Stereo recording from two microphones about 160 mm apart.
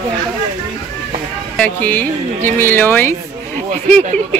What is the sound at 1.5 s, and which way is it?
Speech, 10° left (ahead or behind).